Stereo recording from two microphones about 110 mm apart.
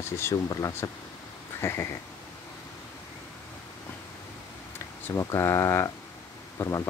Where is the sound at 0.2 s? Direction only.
30° left (ahead or behind).